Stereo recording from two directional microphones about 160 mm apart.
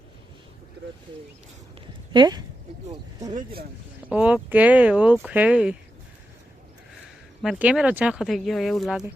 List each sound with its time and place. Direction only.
2.1 s speech: 25° right (ahead or behind)
3.3 s speech: 70° right (ahead or behind)
4.0 s speech: 10° right (ahead or behind)
7.4 s speech: 5° right (ahead or behind)